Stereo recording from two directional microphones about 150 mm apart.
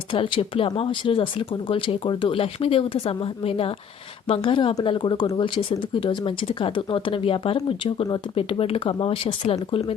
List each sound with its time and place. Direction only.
0.1 s speech: 35° left (ahead or behind)
5.5 s speech: 40° left (ahead or behind)